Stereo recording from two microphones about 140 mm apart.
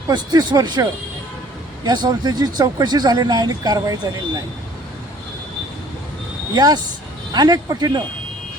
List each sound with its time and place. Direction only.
0.1 s speech: 30° right (ahead or behind)
6.5 s speech: 30° right (ahead or behind)